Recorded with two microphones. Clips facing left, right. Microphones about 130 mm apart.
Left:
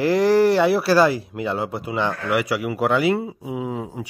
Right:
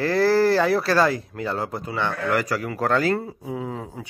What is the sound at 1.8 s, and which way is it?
A man's voice, 15° left (ahead or behind).